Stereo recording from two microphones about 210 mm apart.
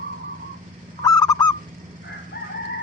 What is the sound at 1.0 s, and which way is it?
Honk, 15° left (ahead or behind).